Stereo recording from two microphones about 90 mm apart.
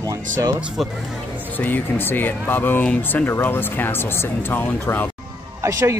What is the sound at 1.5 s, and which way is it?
Speech, 20° left (ahead or behind).